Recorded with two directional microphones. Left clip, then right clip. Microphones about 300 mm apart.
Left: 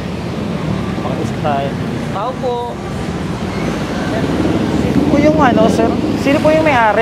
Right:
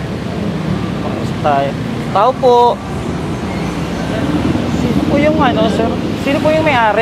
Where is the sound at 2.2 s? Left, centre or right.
Right.